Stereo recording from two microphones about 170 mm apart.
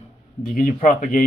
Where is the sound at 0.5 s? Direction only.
55° left (ahead or behind).